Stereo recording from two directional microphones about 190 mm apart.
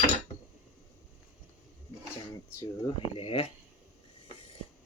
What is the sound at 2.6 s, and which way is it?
Speech, 25° left (ahead or behind).